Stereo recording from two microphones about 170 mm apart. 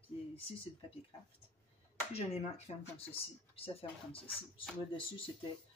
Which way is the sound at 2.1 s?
40° left (ahead or behind).